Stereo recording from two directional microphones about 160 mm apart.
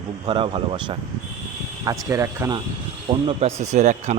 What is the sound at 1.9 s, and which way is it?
Speech, 20° right (ahead or behind).